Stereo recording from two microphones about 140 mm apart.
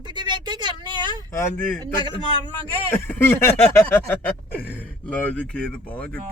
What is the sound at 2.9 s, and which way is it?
Speech, 15° left (ahead or behind).